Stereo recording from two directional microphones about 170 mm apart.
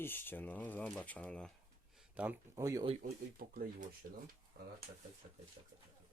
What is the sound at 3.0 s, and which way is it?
Speech, 60° right (ahead or behind).